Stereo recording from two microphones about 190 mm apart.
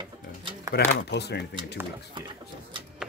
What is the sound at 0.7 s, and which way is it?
Speech, 60° left (ahead or behind).